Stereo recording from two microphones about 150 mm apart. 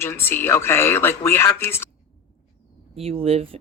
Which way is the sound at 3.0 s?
40° right (ahead or behind).